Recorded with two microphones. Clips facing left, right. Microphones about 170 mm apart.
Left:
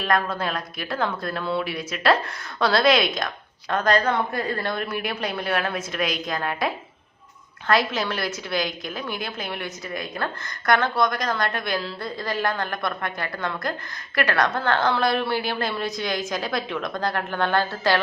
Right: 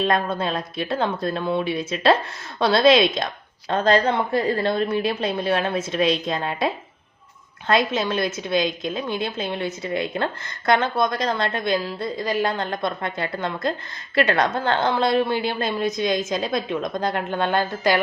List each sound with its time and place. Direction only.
0.0 s a woman's voice: 25° right (ahead or behind)